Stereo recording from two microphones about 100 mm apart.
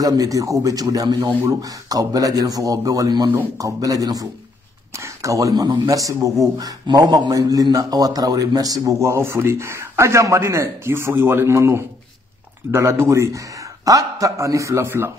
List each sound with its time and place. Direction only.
0.0 s speech: 35° right (ahead or behind)